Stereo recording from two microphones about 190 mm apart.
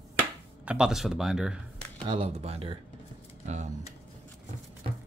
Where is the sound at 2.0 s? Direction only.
30° right (ahead or behind).